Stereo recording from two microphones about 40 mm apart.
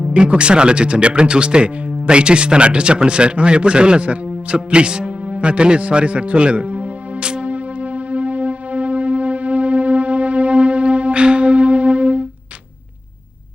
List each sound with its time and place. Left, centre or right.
0.0 s speech: right
7.4 s music: right